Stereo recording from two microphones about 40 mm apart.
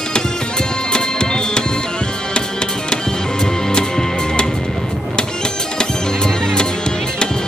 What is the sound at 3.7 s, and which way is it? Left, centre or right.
Music, centre.